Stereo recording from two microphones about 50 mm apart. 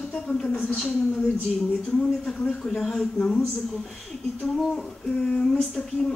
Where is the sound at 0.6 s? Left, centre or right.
Left.